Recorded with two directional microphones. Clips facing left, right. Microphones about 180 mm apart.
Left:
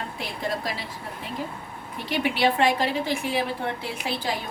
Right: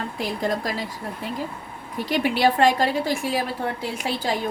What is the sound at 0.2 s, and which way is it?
Speech, 45° right (ahead or behind).